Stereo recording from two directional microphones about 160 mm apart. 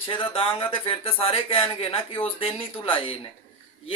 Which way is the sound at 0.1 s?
35° left (ahead or behind).